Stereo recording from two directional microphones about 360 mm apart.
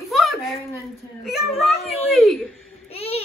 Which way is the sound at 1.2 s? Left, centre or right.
Centre.